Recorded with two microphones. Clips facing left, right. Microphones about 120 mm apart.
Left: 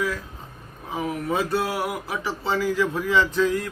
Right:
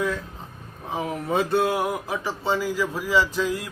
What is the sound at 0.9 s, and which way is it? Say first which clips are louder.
Speech: right 1 dB; 25° right (ahead or behind).